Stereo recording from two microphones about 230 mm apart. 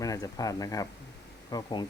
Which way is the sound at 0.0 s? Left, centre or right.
Centre.